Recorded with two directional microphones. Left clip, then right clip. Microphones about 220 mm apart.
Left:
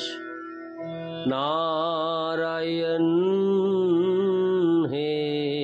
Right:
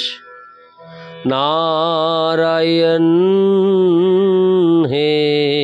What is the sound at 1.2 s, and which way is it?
Mantra, 40° right (ahead or behind).